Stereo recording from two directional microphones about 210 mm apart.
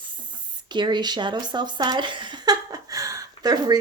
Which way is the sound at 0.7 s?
20° right (ahead or behind).